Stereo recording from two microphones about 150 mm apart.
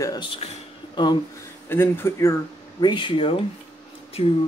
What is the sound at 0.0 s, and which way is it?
Speech, 30° left (ahead or behind).